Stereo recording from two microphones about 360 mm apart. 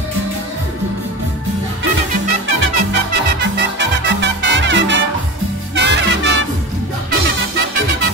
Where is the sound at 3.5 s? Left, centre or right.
Right.